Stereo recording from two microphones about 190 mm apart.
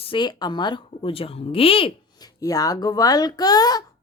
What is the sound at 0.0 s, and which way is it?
Speech, 25° left (ahead or behind).